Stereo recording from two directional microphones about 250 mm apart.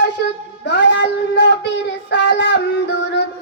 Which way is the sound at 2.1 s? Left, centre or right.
Left.